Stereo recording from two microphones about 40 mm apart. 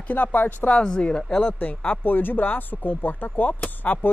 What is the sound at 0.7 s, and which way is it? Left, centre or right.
Speech, left.